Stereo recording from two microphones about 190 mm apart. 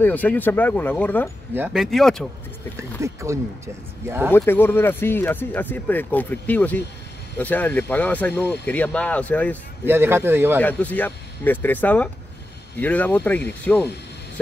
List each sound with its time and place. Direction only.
0.0 s speech: 10° left (ahead or behind)
1.5 s speech: 10° right (ahead or behind)
1.8 s speech: centre (ahead or behind)
3.0 s speech: 15° right (ahead or behind)
4.3 s speech: 10° left (ahead or behind)
9.8 s speech: 10° right (ahead or behind)
10.6 s speech: 10° left (ahead or behind)